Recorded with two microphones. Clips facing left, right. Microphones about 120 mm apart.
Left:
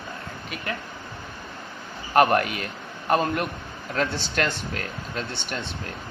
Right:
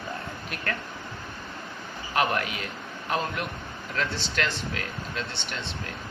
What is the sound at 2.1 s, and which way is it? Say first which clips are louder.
Speech: left 7 dB; 50° left (ahead or behind).